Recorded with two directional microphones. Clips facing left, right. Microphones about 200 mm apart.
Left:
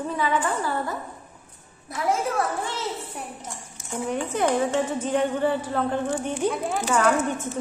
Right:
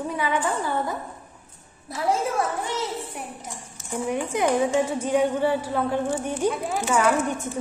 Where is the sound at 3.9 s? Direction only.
10° right (ahead or behind).